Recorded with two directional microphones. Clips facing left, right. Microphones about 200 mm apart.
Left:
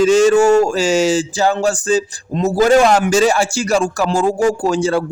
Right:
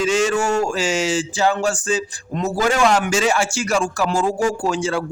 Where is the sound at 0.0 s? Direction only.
40° left (ahead or behind).